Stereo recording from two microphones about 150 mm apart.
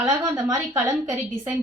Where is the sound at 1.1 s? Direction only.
5° right (ahead or behind).